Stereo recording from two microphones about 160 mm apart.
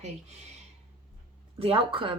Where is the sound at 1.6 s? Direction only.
35° right (ahead or behind).